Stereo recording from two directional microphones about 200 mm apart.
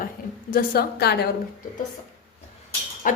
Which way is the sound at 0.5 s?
50° left (ahead or behind).